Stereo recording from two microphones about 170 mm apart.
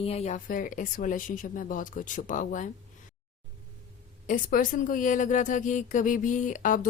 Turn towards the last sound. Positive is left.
turn(degrees=50)  # may be behind; listen again after turning